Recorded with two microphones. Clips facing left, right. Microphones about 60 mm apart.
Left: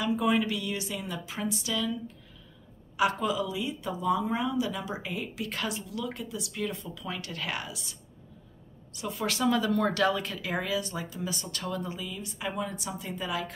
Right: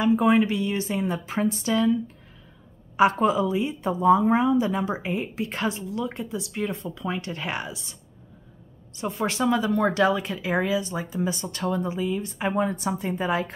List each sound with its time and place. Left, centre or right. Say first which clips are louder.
0.0 s a woman's voice: right 7 dB; right
3.0 s a woman's voice: right 7 dB; right